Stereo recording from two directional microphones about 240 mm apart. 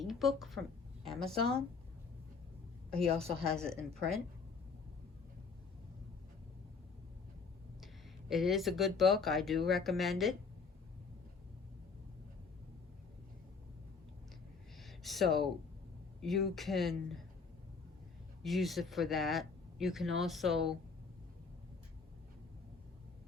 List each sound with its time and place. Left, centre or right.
0.0 s speech: centre
3.1 s speech: right
3.5 s speech: centre
8.3 s speech: centre
14.8 s a sound: centre
16.2 s speech: centre
18.4 s speech: centre